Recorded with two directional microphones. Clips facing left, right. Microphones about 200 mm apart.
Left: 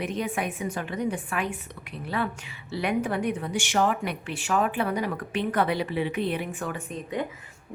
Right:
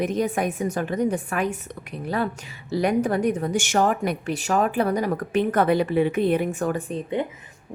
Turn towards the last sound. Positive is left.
turn(degrees=-30)  # may be behind; listen again after turning